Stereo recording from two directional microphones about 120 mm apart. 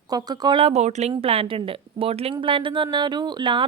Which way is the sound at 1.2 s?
55° right (ahead or behind).